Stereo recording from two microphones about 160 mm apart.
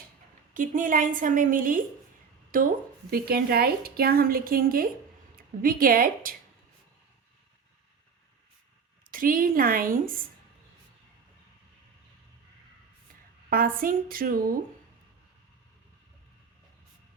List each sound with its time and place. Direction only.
0.5 s a woman's voice: 55° right (ahead or behind)
9.0 s a woman's voice: 60° right (ahead or behind)
13.5 s a woman's voice: 65° right (ahead or behind)